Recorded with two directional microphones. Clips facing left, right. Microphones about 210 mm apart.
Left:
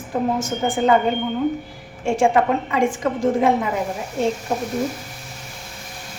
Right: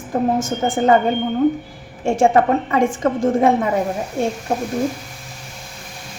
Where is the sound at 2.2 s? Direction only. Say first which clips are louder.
Right 3 dB; 45° right (ahead or behind).